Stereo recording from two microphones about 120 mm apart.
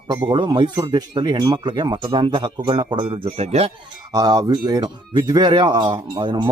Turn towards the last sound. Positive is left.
turn(degrees=-40)  # may be behind; listen again after turning